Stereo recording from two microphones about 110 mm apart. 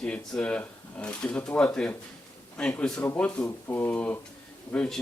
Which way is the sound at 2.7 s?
20° left (ahead or behind).